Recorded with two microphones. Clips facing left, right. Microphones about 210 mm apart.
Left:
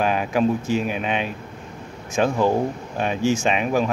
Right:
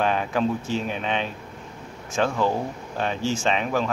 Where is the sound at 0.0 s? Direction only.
10° left (ahead or behind).